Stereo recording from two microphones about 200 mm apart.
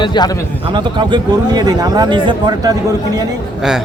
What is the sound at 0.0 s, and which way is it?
Speech, 20° left (ahead or behind).